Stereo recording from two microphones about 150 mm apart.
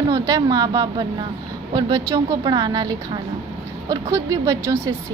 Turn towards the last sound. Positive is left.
turn(degrees=-20)  # may be behind; listen again after turning